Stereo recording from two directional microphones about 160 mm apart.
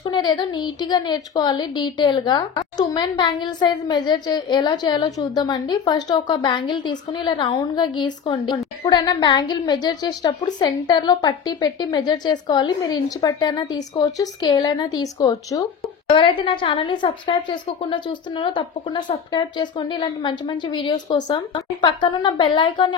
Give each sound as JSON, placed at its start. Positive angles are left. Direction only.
{"t": 0.0, "sound": "a woman's voice", "side_deg": 25}
{"t": 16.1, "sound": "a woman's voice", "side_deg": 35}